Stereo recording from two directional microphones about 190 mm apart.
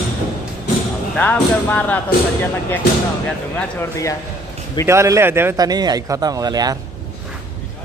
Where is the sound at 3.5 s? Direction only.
10° left (ahead or behind).